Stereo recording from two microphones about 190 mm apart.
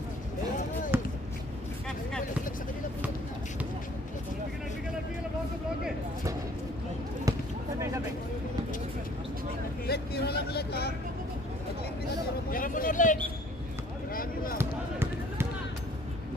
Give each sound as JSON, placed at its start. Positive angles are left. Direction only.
{"t": 0.9, "sound": "basketball bounce", "side_deg": -10}
{"t": 9.8, "sound": "vehicle", "side_deg": 55}
{"t": 12.5, "sound": "vehicle", "side_deg": 45}
{"t": 14.1, "sound": "a sound", "side_deg": 50}
{"t": 14.6, "sound": "basketball bounce", "side_deg": -10}